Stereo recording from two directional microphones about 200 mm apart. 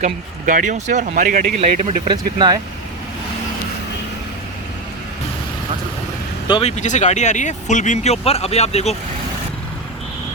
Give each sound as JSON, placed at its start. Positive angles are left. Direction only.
{"t": 0.0, "sound": "speech", "side_deg": -40}
{"t": 6.5, "sound": "speech", "side_deg": 30}